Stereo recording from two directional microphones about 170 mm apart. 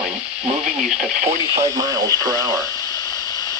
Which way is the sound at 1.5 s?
20° right (ahead or behind).